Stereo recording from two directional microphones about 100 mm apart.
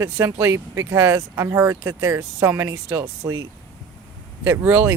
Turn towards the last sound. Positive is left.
turn(degrees=-20)  # may be behind; listen again after turning